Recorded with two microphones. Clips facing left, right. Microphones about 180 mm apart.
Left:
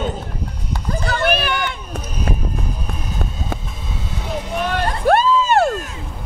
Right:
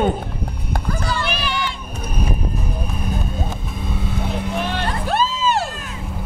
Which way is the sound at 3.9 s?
55° right (ahead or behind).